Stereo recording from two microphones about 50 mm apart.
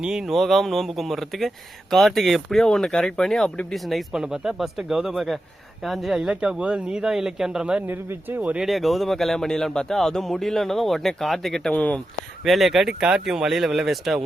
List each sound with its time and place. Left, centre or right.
0.0 s speech: centre
0.3 s speech: centre
4.1 s speech: centre
6.3 s speech: centre
8.6 s speech: centre
11.7 s speech: left
12.5 s speech: centre